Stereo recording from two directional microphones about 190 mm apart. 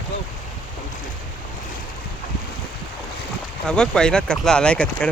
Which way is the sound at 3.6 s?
5° left (ahead or behind).